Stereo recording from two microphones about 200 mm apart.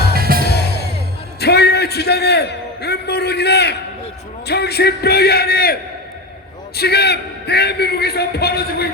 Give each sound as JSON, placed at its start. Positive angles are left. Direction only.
{"t": 0.1, "sound": "music", "side_deg": -50}
{"t": 0.4, "sound": "music", "side_deg": 55}
{"t": 1.4, "sound": "a sound", "side_deg": 55}
{"t": 4.4, "sound": "a man's voice", "side_deg": 55}
{"t": 6.7, "sound": "a man's voice", "side_deg": 55}